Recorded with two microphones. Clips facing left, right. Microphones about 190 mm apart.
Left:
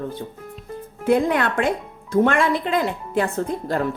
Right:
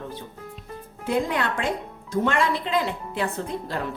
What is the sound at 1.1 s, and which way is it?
A woman's voice, 55° left (ahead or behind).